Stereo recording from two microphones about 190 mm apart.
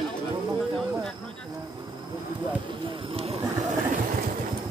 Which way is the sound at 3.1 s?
30° right (ahead or behind).